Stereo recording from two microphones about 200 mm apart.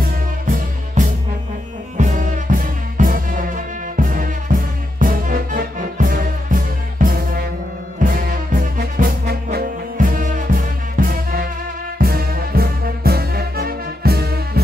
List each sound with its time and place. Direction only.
2.0 s music: 40° right (ahead or behind)
8.0 s brass instrument: 45° right (ahead or behind)
12.0 s music: 50° right (ahead or behind)